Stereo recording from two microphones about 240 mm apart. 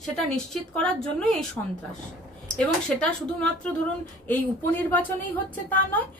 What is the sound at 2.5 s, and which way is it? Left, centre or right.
A woman's voice, centre.